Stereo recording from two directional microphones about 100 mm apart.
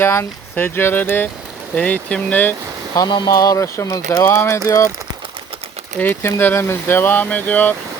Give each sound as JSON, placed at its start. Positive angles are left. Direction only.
{"t": 0.0, "sound": "speech", "side_deg": 25}
{"t": 2.9, "sound": "speech", "side_deg": 40}
{"t": 3.2, "sound": "a sound", "side_deg": 35}
{"t": 6.0, "sound": "speech", "side_deg": 25}